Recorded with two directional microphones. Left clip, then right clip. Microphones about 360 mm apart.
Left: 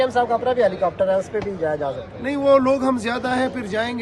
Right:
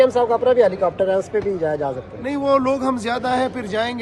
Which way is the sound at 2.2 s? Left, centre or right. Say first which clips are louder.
Left 2 dB; centre.